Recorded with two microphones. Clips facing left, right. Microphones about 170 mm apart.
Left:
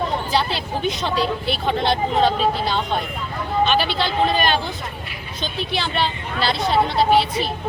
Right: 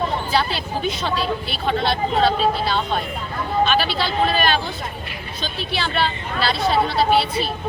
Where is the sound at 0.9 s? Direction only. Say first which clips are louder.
Left 2 dB; 15° left (ahead or behind).